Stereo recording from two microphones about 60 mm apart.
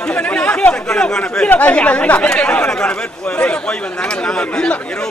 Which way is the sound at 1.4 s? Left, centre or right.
Left.